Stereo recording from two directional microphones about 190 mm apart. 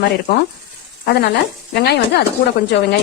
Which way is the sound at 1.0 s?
60° left (ahead or behind).